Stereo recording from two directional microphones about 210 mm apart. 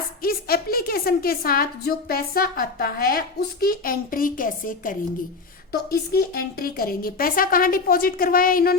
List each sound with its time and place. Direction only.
0.2 s a woman's voice: 45° left (ahead or behind)